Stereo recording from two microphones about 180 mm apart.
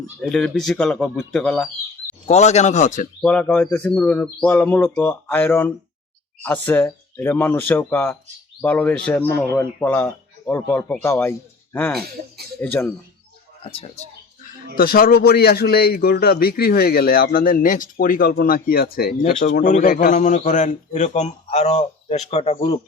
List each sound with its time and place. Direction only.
0.2 s speech: 5° left (ahead or behind)
2.2 s a man's voice: 40° left (ahead or behind)
3.2 s speech: 5° left (ahead or behind)
13.7 s a man's voice: 30° left (ahead or behind)
14.8 s a man's voice: 55° left (ahead or behind); by 22.8 s 35° left (ahead or behind)